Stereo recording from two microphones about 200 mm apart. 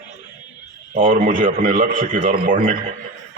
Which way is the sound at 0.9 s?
40° right (ahead or behind).